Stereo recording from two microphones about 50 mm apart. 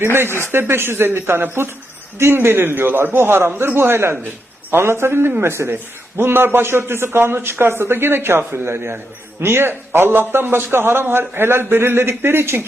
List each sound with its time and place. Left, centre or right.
0.0 s a man's voice: right